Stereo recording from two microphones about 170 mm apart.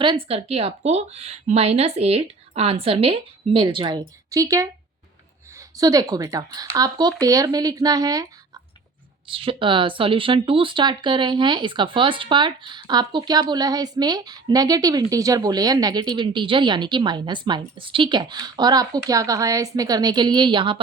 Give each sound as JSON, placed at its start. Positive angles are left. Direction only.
{"t": 0.0, "sound": "a woman's voice", "side_deg": -30}
{"t": 9.2, "sound": "speech", "side_deg": -30}